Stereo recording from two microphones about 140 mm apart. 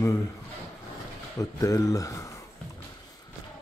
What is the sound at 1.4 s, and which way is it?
Speech, 25° left (ahead or behind).